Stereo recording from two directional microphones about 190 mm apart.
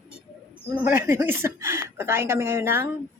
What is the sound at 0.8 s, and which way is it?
A woman's voice, 15° right (ahead or behind).